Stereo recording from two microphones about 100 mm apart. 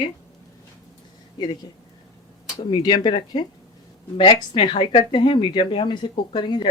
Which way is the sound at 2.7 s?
50° left (ahead or behind).